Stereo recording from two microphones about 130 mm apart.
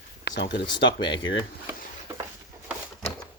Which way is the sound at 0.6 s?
35° left (ahead or behind).